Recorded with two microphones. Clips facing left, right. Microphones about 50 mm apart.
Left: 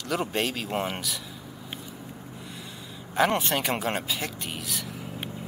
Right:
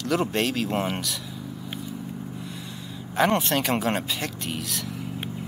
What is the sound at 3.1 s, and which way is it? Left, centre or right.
Speech, centre.